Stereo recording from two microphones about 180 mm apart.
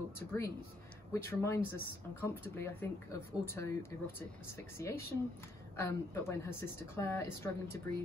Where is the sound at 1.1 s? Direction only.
15° left (ahead or behind).